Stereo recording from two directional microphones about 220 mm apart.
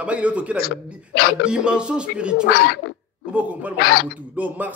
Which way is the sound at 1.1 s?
45° left (ahead or behind).